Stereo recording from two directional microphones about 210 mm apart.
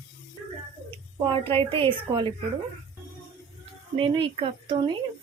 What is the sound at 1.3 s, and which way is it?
Speech, 25° right (ahead or behind).